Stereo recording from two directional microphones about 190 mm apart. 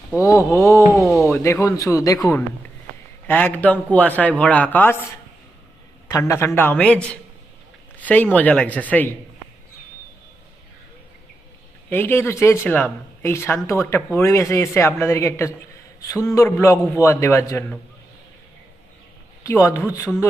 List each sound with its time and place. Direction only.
0.2 s speech: 15° left (ahead or behind)
3.2 s speech: 10° left (ahead or behind)
6.1 s speech: 15° left (ahead or behind)
11.9 s speech: 10° left (ahead or behind)
19.5 s speech: 15° left (ahead or behind)